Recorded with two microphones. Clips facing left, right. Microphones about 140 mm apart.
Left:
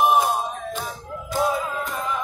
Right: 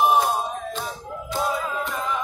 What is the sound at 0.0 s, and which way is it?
Music, 10° left (ahead or behind).